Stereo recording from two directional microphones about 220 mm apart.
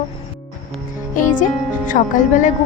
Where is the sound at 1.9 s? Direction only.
35° left (ahead or behind).